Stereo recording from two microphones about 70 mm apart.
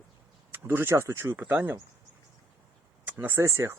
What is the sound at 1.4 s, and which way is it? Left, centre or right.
Speech, right.